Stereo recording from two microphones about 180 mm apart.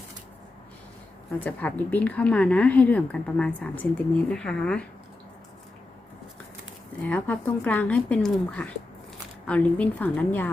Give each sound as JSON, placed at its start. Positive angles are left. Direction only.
{"t": 1.5, "sound": "a woman's voice", "side_deg": 10}
{"t": 7.0, "sound": "a woman's voice", "side_deg": 10}